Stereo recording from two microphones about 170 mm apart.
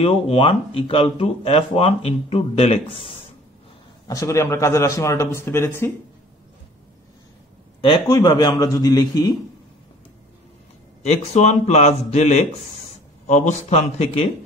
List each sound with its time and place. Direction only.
0.0 s speech: 35° left (ahead or behind)
4.1 s a man's voice: 20° left (ahead or behind)
7.8 s a man's voice: 25° left (ahead or behind)
11.1 s speech: 40° left (ahead or behind)